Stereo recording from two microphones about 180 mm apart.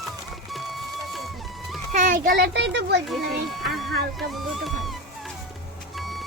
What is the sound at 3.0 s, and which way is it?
Speech, centre (ahead or behind).